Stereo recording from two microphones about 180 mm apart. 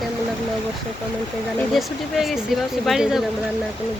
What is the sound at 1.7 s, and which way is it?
Speech, centre (ahead or behind).